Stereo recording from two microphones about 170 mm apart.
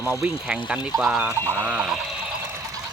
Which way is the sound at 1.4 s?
10° left (ahead or behind).